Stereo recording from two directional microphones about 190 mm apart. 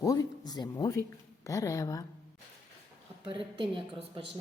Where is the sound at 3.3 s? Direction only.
25° right (ahead or behind).